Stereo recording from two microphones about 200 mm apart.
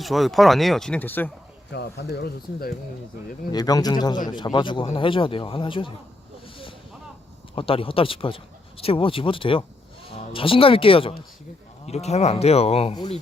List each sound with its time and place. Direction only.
0.0 s speech: centre (ahead or behind)
1.7 s speech: 55° left (ahead or behind)
3.5 s speech: 20° left (ahead or behind)
7.5 s speech: 25° left (ahead or behind)